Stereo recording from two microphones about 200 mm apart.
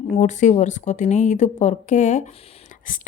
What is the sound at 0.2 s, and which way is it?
A woman's voice, 35° left (ahead or behind).